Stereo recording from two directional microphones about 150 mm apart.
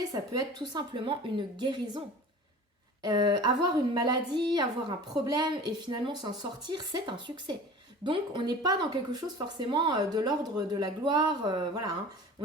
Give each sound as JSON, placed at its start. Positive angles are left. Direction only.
{"t": 0.7, "sound": "a woman's voice", "side_deg": -30}
{"t": 3.0, "sound": "a woman's voice", "side_deg": -30}